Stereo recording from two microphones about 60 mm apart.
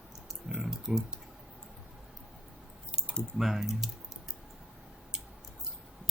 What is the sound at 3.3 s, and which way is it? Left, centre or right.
Speech, centre.